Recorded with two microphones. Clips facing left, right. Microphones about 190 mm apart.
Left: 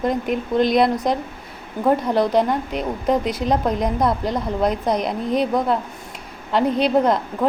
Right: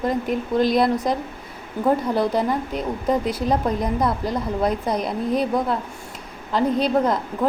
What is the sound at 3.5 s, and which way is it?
Speech, 20° left (ahead or behind).